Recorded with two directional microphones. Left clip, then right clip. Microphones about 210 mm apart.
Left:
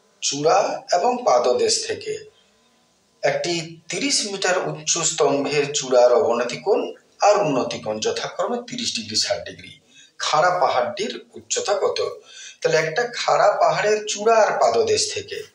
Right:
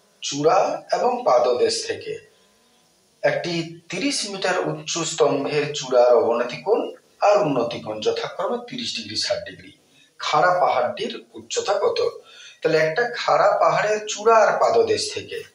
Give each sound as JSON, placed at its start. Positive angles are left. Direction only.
{"t": 0.2, "sound": "speech", "side_deg": 20}
{"t": 3.2, "sound": "speech", "side_deg": 20}